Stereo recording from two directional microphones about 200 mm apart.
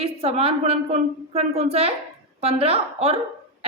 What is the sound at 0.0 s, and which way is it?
A woman's voice, 30° right (ahead or behind).